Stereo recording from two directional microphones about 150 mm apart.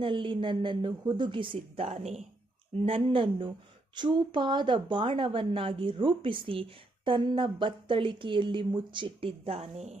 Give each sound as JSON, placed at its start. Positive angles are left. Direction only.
{"t": 0.0, "sound": "speech", "side_deg": -35}